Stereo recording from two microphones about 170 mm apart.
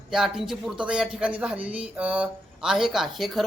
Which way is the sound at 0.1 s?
Centre (ahead or behind).